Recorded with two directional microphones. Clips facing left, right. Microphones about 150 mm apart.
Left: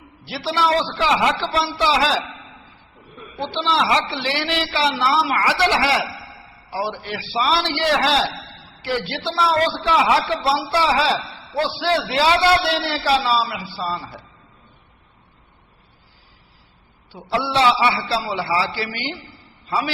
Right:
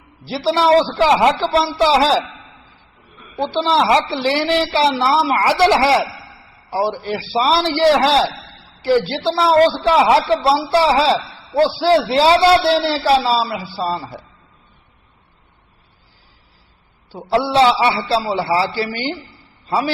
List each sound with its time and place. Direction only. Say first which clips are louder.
0.3 s a woman's voice: right 6 dB; 35° right (ahead or behind)
3.3 s a woman's voice: right 5 dB; 40° right (ahead or behind)
17.1 s a woman's voice: right 6 dB; 40° right (ahead or behind)